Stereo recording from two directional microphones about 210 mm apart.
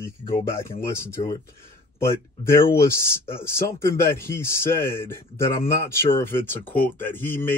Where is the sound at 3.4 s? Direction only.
10° left (ahead or behind).